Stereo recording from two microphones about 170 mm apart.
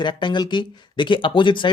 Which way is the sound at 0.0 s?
25° left (ahead or behind).